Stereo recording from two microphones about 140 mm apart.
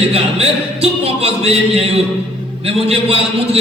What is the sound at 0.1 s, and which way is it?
A man's voice, 45° right (ahead or behind).